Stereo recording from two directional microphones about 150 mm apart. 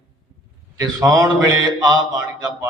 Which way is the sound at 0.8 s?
25° right (ahead or behind).